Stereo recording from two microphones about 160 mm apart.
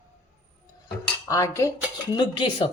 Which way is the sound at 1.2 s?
20° left (ahead or behind).